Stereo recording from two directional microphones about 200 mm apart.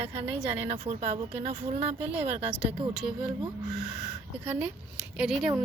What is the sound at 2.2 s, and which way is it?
Speech, 30° right (ahead or behind).